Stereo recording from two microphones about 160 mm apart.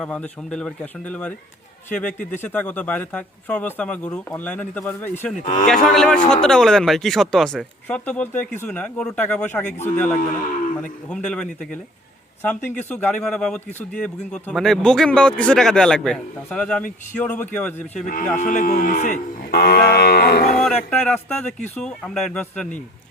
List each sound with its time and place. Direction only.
0.0 s a man's voice: 5° left (ahead or behind)
2.4 s a man's voice: 10° left (ahead or behind)
5.6 s a man's voice: centre (ahead or behind)
10.2 s cattle: 55° left (ahead or behind)
11.1 s a man's voice: 5° left (ahead or behind)
18.0 s cattle: 55° left (ahead or behind)
19.5 s livestock: 75° left (ahead or behind)
20.6 s a man's voice: 5° left (ahead or behind)